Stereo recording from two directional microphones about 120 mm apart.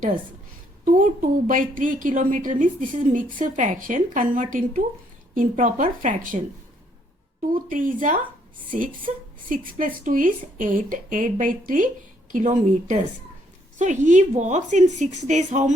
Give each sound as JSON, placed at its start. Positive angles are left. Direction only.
{"t": 0.9, "sound": "a woman's voice", "side_deg": -90}
{"t": 7.7, "sound": "a woman's voice", "side_deg": -90}
{"t": 9.7, "sound": "a woman's voice", "side_deg": -90}